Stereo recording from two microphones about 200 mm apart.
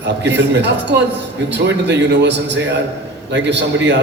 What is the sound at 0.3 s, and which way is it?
Speech, 60° right (ahead or behind).